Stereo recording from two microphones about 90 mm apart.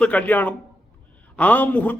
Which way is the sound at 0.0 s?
15° left (ahead or behind).